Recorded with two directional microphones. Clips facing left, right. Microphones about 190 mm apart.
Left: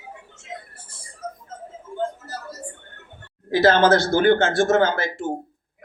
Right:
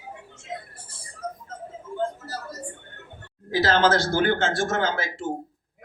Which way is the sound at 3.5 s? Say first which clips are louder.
Left 5 dB; 55° left (ahead or behind).